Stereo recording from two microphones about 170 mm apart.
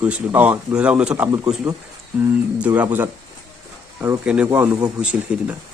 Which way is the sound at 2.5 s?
10° right (ahead or behind).